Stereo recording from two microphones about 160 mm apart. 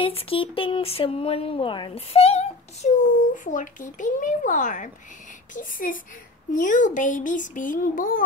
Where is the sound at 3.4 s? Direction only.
55° left (ahead or behind).